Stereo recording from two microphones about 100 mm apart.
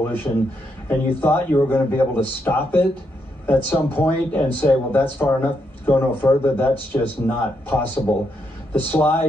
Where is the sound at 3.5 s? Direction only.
20° left (ahead or behind).